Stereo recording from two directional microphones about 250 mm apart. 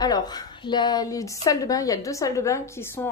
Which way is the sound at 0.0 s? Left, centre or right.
Centre.